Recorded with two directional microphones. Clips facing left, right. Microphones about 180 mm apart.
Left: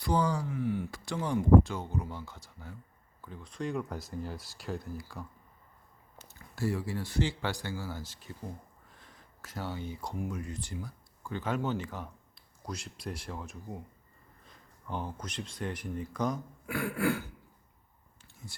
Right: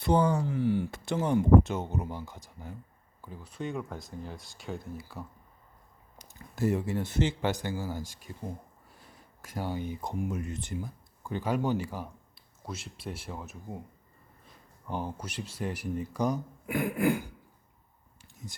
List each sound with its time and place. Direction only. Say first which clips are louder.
0.0 s speech: right 4 dB; 25° right (ahead or behind); by 5.2 s centre (ahead or behind)
6.1 s speech: right 5 dB; 15° right (ahead or behind)
8.9 s a sound: right 2 dB; 10° right (ahead or behind)
10.2 s speech: right 3 dB; 20° right (ahead or behind); by 13.7 s 5° right (ahead or behind)
14.9 s speech: right 2 dB; 10° right (ahead or behind)
18.2 s a sound: right 4 dB; 20° right (ahead or behind)